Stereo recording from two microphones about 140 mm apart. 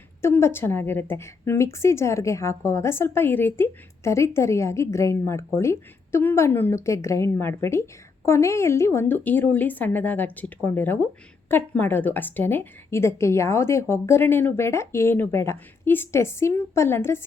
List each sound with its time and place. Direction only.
0.2 s a woman's voice: 20° left (ahead or behind)